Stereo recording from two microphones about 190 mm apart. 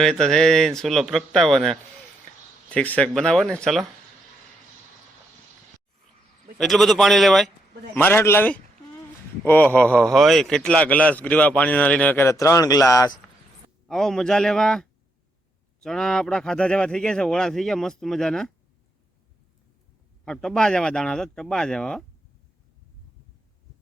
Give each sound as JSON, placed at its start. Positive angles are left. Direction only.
{"t": 0.0, "sound": "speech", "side_deg": 0}
{"t": 6.6, "sound": "a man's voice", "side_deg": 0}
{"t": 13.8, "sound": "speech", "side_deg": 0}
{"t": 20.2, "sound": "speech", "side_deg": 5}